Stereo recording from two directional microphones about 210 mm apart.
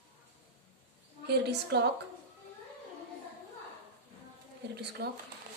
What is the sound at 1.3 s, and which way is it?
Speech, 50° right (ahead or behind).